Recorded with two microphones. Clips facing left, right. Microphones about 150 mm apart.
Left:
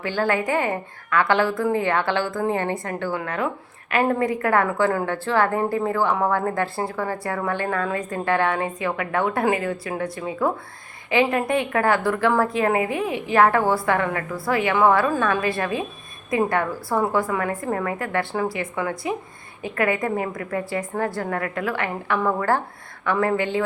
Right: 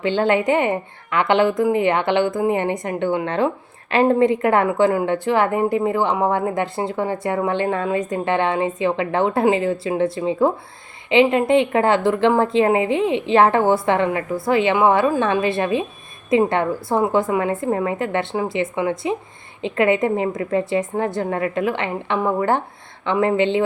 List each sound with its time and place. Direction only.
0.0 s a woman's voice: 20° right (ahead or behind)